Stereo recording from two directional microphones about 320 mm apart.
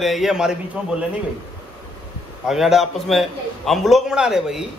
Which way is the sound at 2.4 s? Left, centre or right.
Centre.